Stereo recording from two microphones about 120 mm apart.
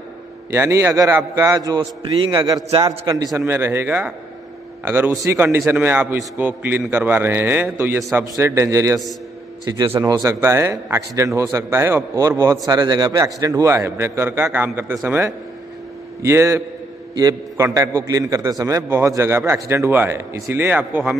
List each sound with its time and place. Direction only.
0.5 s a man's voice: 25° right (ahead or behind)
1.8 s a man's voice: 45° right (ahead or behind)
2.8 s a man's voice: 30° right (ahead or behind)
3.3 s a man's voice: 20° right (ahead or behind)